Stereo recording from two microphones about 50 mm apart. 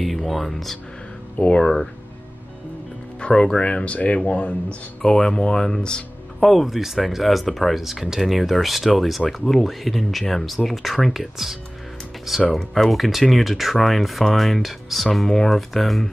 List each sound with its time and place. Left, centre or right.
0.0 s speech: centre
3.2 s speech: centre
5.0 s speech: centre
6.4 s speech: centre
12.5 s speech: centre